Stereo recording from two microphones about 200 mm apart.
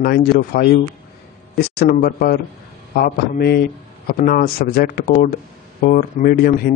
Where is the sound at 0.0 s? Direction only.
50° left (ahead or behind).